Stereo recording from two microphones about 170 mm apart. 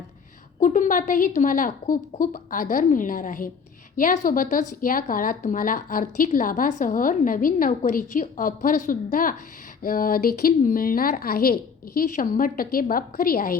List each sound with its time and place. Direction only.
0.6 s a woman's voice: 50° left (ahead or behind)